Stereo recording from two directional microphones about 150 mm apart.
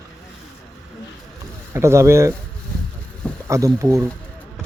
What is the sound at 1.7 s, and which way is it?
Speech, 20° right (ahead or behind).